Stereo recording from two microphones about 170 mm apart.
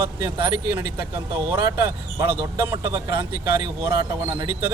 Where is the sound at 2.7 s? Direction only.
20° right (ahead or behind).